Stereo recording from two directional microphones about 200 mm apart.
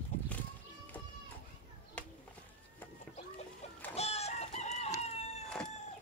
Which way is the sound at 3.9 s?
30° left (ahead or behind).